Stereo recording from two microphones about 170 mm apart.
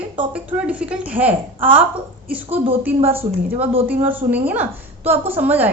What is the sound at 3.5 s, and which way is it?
Speech, 35° right (ahead or behind).